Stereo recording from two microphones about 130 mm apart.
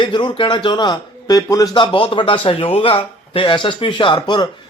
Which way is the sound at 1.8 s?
40° left (ahead or behind).